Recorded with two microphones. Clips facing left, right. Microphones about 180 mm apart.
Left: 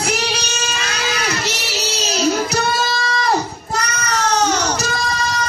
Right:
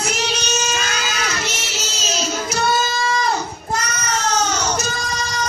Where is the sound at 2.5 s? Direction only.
65° left (ahead or behind).